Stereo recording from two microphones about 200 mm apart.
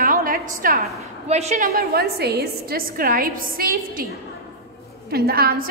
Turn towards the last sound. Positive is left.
turn(degrees=-50)  # may be behind; listen again after turning